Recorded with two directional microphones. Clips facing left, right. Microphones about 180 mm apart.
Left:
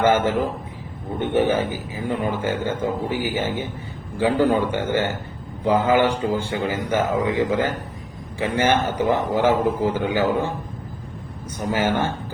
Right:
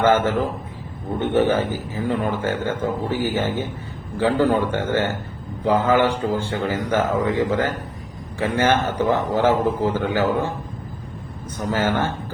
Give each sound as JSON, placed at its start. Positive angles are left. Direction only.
{"t": 0.0, "sound": "a man's voice", "side_deg": 15}
{"t": 11.5, "sound": "a man's voice", "side_deg": 10}